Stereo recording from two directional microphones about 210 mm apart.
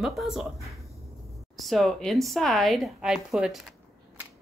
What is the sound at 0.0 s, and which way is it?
Speech, centre (ahead or behind).